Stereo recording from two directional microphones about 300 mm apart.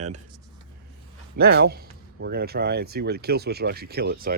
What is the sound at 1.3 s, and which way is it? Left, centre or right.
Speech, right.